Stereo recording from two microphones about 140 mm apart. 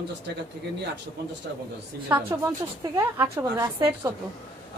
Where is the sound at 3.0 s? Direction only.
20° right (ahead or behind).